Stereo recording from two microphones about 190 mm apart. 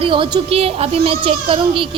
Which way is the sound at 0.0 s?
25° right (ahead or behind).